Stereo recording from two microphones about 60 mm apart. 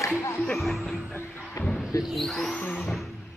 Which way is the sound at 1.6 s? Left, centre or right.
Left.